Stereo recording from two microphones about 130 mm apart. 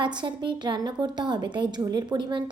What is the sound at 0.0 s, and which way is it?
A woman's voice, 35° right (ahead or behind).